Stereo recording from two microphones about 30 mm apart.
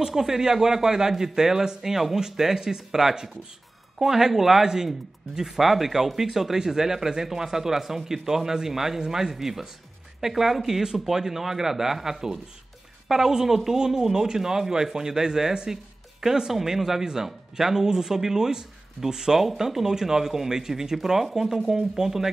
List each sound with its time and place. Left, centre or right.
0.1 s speech: centre
5.7 s speech: centre